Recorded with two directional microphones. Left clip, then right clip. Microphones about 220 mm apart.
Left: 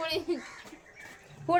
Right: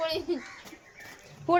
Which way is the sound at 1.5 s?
25° right (ahead or behind).